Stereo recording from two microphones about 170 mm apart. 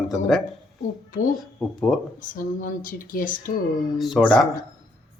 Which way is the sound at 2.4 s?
55° left (ahead or behind).